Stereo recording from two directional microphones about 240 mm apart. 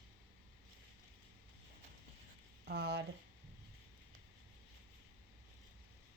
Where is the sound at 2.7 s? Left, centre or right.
Right.